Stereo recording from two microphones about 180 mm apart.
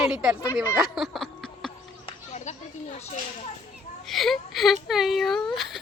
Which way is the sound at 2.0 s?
40° left (ahead or behind).